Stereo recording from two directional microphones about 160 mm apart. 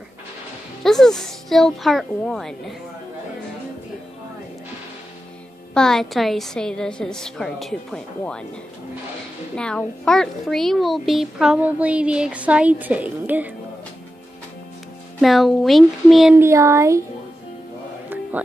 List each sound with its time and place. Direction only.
0.8 s a woman's voice: 5° left (ahead or behind)
5.8 s a woman's voice: 5° left (ahead or behind)
9.6 s a child's voice: 5° left (ahead or behind)
15.1 s a woman's voice: centre (ahead or behind)
16.3 s a child's voice: 15° right (ahead or behind)
18.3 s music: 10° right (ahead or behind)